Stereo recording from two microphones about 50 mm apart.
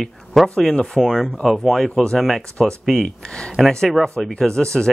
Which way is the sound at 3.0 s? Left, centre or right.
Centre.